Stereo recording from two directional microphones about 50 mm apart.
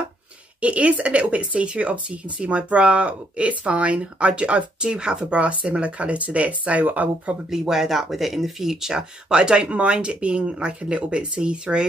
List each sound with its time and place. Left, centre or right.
0.6 s speech: right
7.5 s speech: centre